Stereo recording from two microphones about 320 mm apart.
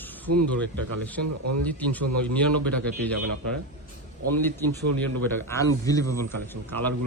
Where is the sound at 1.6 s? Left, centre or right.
Centre.